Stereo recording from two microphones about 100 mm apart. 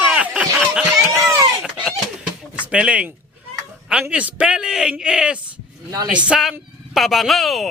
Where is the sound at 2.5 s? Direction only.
10° right (ahead or behind).